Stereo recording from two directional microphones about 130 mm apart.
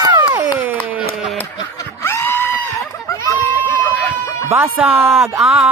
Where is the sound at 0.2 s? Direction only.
15° right (ahead or behind).